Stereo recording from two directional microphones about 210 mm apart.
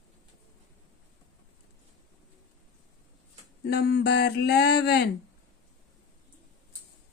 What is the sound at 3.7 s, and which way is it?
Speech, 50° left (ahead or behind).